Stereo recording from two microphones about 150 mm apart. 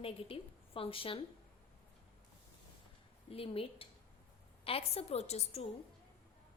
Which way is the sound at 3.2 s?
40° left (ahead or behind).